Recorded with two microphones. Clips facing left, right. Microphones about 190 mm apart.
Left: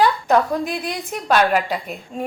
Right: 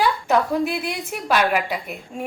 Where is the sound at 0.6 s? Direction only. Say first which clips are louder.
Right 1 dB; 5° right (ahead or behind).